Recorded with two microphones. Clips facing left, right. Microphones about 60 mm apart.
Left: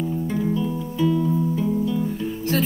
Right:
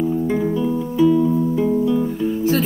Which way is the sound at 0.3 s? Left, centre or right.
Right.